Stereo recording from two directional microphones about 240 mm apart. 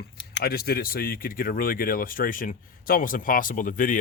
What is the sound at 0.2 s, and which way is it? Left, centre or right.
Speech, left.